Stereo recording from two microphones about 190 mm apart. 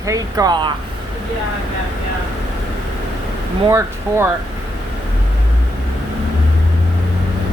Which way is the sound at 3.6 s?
15° right (ahead or behind).